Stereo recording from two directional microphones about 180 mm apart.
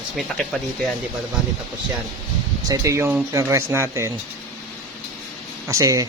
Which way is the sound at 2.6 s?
15° right (ahead or behind).